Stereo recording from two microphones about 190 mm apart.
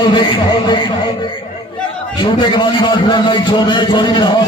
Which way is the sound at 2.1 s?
25° left (ahead or behind).